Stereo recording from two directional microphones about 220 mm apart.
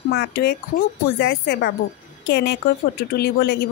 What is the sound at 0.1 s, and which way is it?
Speech, 50° left (ahead or behind).